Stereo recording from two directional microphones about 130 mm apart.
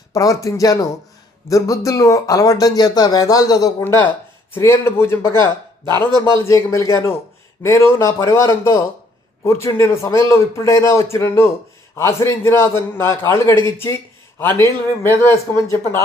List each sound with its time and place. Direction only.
0.1 s speech: 25° left (ahead or behind)
6.1 s a man's voice: 35° right (ahead or behind)
6.3 s a man's voice: 25° left (ahead or behind)